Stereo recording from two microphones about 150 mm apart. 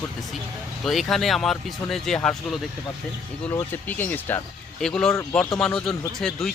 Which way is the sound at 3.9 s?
15° left (ahead or behind).